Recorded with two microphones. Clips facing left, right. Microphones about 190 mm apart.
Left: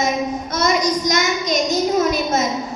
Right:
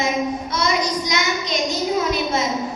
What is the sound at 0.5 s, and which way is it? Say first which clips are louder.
Child singing: left 5 dB; 45° left (ahead or behind).